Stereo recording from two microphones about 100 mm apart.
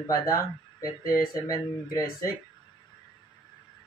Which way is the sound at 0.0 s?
35° left (ahead or behind).